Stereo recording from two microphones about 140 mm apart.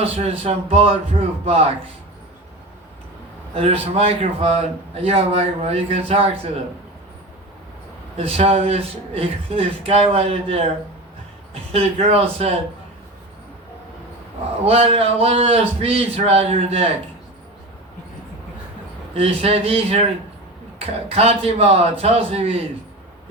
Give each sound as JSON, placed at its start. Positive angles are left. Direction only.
{"t": 0.0, "sound": "a man's voice", "side_deg": -50}
{"t": 3.5, "sound": "a man's voice", "side_deg": -45}
{"t": 8.2, "sound": "a man's voice", "side_deg": -45}
{"t": 14.6, "sound": "a man's voice", "side_deg": -45}
{"t": 19.1, "sound": "a man's voice", "side_deg": -45}